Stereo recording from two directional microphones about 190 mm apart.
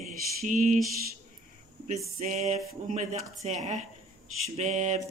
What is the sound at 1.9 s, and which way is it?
Speech, 40° right (ahead or behind).